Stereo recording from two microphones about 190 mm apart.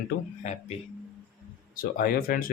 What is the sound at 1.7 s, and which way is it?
Speech, 50° left (ahead or behind).